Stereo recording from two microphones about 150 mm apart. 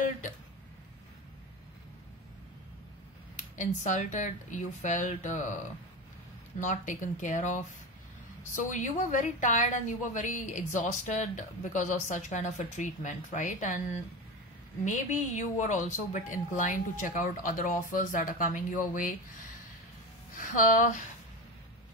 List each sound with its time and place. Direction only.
3.3 s a woman's voice: 55° left (ahead or behind)
6.6 s a woman's voice: 55° left (ahead or behind)
14.9 s a woman's voice: 55° left (ahead or behind)
20.3 s speech: 60° left (ahead or behind)